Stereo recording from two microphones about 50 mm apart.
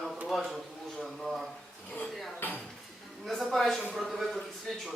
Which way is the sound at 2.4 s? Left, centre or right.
Left.